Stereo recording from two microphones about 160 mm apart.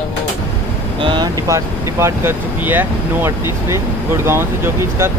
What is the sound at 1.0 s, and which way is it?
Speech, 30° right (ahead or behind).